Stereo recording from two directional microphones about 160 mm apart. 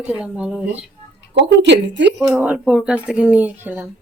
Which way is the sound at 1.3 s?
90° right.